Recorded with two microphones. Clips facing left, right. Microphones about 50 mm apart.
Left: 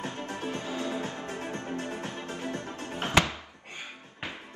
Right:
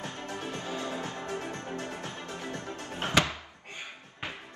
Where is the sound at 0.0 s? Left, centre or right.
Left.